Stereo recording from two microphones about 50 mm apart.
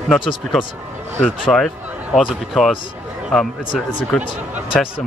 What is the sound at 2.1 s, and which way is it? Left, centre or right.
Speech, centre.